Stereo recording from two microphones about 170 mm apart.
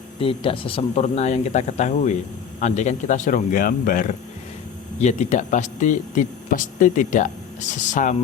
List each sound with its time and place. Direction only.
0.2 s speech: 30° left (ahead or behind); by 8.1 s 50° left (ahead or behind)